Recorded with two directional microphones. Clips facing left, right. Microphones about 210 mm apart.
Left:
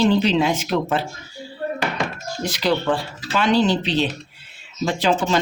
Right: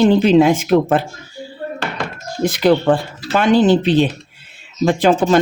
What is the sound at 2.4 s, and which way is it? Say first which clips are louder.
A man's voice: right 8 dB; 50° right (ahead or behind).